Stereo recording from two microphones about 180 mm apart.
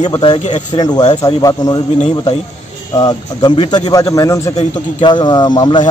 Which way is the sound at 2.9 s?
20° left (ahead or behind).